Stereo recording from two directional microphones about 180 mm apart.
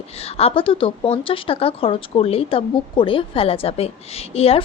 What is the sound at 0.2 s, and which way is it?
A woman's voice, 35° left (ahead or behind).